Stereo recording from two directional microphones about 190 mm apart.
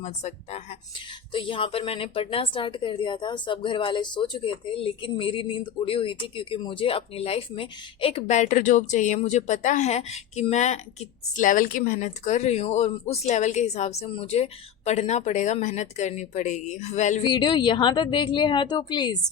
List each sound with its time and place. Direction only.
0.0 s a woman's voice: 35° left (ahead or behind)
17.2 s a woman's voice: 25° left (ahead or behind)